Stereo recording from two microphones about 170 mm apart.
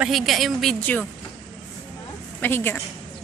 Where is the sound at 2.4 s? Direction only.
15° left (ahead or behind).